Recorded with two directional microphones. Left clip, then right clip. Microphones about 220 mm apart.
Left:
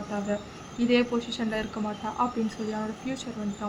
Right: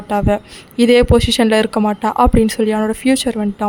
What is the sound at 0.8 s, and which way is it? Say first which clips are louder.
Speech: right 15 dB; 50° right (ahead or behind).